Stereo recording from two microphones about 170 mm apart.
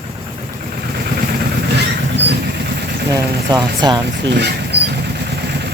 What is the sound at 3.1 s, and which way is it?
Speech, 25° right (ahead or behind).